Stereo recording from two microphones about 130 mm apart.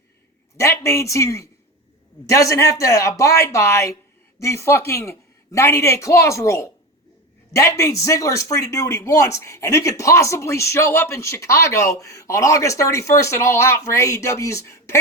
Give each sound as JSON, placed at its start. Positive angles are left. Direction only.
{"t": 0.5, "sound": "a man's voice", "side_deg": 20}